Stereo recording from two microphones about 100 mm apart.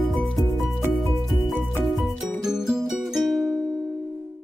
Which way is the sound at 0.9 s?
Centre (ahead or behind).